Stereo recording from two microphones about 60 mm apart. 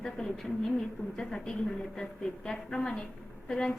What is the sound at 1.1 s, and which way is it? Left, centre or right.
A woman's voice, centre.